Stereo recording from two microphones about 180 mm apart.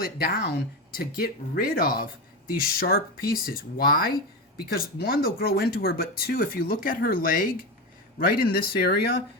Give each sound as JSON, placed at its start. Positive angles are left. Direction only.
{"t": 0.0, "sound": "speech", "side_deg": 60}